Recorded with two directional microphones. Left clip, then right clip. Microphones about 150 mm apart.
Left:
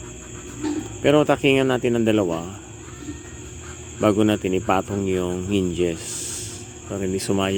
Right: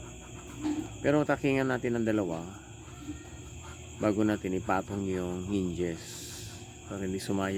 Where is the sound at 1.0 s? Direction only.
10° left (ahead or behind).